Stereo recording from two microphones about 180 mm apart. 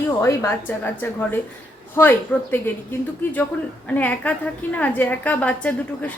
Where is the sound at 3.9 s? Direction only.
10° left (ahead or behind).